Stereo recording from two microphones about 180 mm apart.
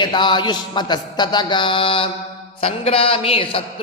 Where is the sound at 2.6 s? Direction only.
30° left (ahead or behind).